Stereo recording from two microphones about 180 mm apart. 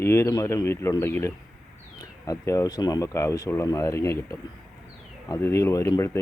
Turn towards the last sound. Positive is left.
turn(degrees=15)  # may be behind; listen again after turning